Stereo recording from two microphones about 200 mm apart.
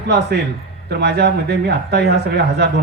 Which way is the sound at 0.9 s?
55° right (ahead or behind).